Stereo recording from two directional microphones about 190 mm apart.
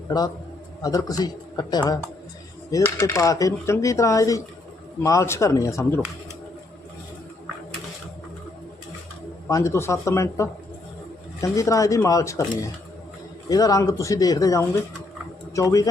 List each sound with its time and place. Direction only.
0.8 s speech: 20° left (ahead or behind)
9.5 s speech: 15° left (ahead or behind)
13.5 s speech: 20° left (ahead or behind)